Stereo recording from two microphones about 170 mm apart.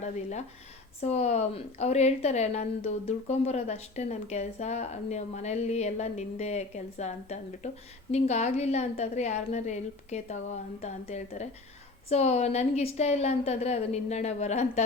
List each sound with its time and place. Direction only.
0.0 s a woman's voice: 40° left (ahead or behind)